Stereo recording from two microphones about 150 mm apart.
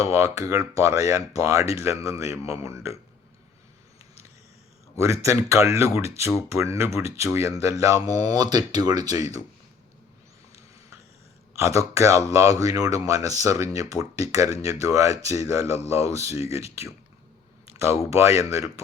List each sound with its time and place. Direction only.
0.0 s speech: 20° right (ahead or behind)
4.9 s speech: 20° right (ahead or behind)
11.5 s speech: 20° right (ahead or behind)
18.1 s speech: 20° right (ahead or behind)